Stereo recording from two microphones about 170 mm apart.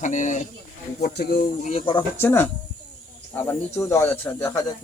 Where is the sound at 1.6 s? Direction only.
35° left (ahead or behind).